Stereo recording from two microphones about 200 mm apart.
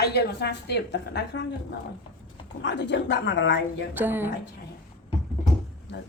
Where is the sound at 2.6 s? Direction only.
65° left (ahead or behind).